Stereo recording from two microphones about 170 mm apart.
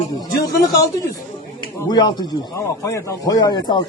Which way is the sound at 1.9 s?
25° left (ahead or behind).